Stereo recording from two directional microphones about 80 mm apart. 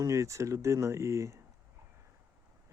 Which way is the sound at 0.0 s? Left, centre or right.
Right.